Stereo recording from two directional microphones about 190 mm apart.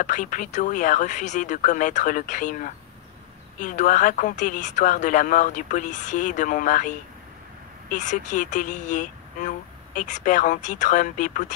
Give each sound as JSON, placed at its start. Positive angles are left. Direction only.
{"t": 0.0, "sound": "speech", "side_deg": 40}